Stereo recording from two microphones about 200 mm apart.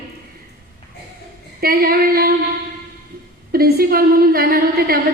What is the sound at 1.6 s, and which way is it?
Female singing, 50° right (ahead or behind).